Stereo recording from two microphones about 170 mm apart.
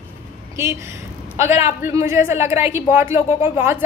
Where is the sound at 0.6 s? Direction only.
15° right (ahead or behind).